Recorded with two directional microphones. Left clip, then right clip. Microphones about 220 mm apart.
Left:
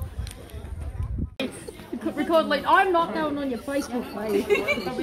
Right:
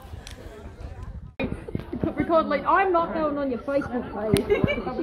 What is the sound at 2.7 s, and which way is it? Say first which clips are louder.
Speech: left 2 dB; 25° left (ahead or behind).